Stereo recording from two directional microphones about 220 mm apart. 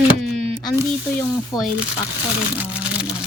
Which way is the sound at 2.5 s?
5° right (ahead or behind).